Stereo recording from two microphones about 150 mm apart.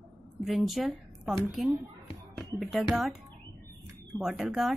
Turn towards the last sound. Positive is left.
turn(degrees=-5)  # may be behind; listen again after turning